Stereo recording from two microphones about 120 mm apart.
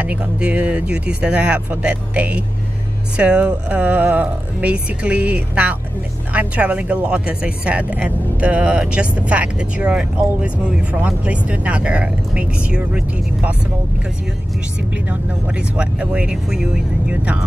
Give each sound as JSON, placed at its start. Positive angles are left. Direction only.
{"t": 0.0, "sound": "speech", "side_deg": -10}
{"t": 15.0, "sound": "speech", "side_deg": -10}